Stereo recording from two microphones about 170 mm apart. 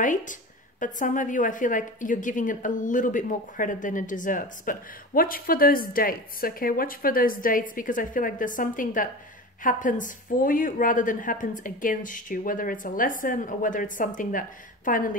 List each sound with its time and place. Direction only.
0.0 s a woman's voice: 50° left (ahead or behind)